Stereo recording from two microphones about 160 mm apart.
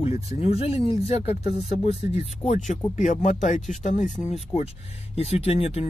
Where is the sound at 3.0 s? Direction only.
50° left (ahead or behind).